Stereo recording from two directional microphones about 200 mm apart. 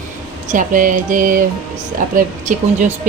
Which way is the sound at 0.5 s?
40° right (ahead or behind).